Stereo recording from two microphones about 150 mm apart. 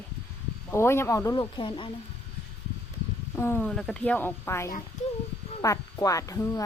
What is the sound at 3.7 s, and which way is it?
Speech, 5° left (ahead or behind).